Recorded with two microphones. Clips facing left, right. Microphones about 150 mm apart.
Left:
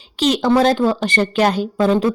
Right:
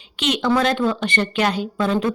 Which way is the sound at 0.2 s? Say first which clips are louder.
Left 5 dB; 40° left (ahead or behind).